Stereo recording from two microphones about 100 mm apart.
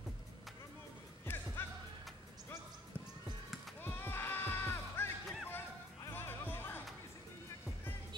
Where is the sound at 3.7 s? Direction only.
20° left (ahead or behind).